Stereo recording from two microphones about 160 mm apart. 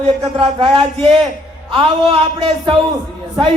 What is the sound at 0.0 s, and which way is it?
Speech, 40° right (ahead or behind).